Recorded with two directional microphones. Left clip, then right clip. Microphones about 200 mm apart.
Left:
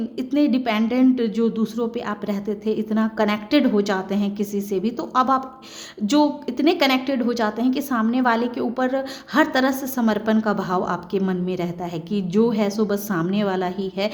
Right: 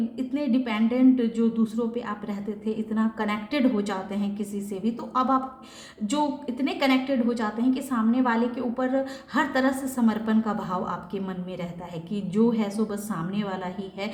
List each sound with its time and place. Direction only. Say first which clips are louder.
0.2 s a woman's voice: left 8 dB; 50° left (ahead or behind)